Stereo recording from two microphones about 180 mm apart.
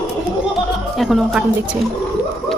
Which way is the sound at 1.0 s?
Centre (ahead or behind).